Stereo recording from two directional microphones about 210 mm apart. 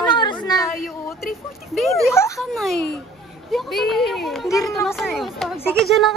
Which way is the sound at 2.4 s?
Centre (ahead or behind).